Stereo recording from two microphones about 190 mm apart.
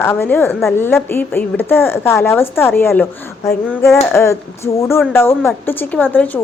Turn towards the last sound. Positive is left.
turn(degrees=10)  # may be behind; listen again after turning